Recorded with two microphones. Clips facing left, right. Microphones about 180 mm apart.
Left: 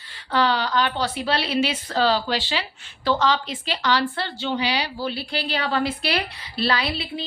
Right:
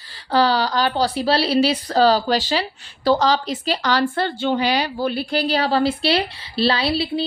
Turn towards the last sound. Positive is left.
turn(degrees=-35)  # may be behind; listen again after turning